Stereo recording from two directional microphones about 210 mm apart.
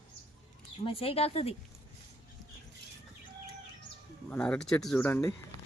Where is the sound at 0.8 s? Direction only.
25° left (ahead or behind).